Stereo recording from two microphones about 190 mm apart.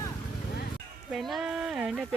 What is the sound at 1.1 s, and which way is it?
Speech, centre (ahead or behind).